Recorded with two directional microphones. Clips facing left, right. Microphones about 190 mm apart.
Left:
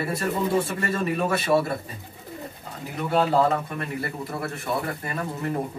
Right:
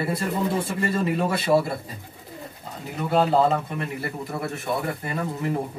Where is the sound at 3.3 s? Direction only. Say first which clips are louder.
Right 1 dB; 20° right (ahead or behind).